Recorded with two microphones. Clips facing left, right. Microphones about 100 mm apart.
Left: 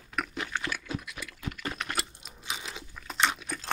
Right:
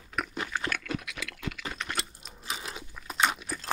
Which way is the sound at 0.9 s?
70° right (ahead or behind).